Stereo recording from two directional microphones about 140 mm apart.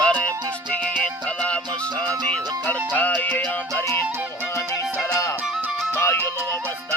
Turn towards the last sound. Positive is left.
turn(degrees=15)  # may be behind; listen again after turning